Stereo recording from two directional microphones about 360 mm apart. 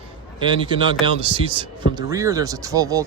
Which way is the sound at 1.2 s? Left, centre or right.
Centre.